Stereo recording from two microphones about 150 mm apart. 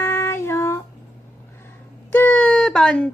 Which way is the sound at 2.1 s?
10° left (ahead or behind).